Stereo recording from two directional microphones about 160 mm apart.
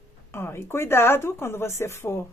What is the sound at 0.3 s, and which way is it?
Speech, 15° left (ahead or behind).